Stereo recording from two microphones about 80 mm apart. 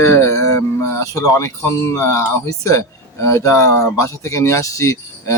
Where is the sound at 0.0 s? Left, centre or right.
Left.